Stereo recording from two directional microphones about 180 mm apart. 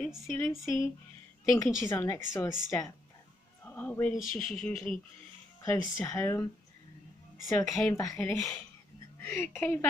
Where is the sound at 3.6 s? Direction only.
10° left (ahead or behind).